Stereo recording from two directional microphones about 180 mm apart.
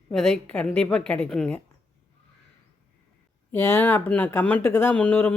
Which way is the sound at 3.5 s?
15° left (ahead or behind).